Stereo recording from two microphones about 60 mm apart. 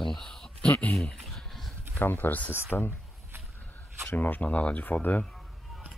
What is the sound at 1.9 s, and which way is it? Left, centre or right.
Speech, left.